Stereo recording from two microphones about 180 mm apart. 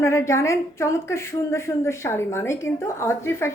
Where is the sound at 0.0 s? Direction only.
15° left (ahead or behind).